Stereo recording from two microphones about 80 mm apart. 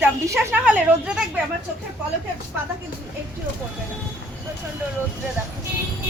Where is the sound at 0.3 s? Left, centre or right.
Centre.